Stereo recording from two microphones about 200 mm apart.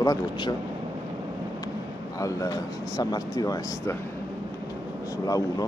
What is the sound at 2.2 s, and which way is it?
Speech, 15° left (ahead or behind).